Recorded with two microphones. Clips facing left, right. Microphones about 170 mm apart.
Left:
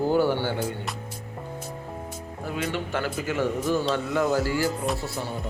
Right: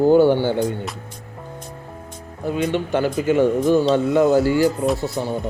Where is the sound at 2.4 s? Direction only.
20° right (ahead or behind).